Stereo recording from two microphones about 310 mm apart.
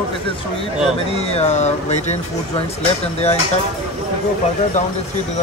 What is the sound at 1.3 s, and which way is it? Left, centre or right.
Speech, left.